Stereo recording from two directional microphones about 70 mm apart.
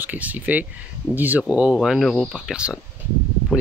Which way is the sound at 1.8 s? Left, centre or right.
Centre.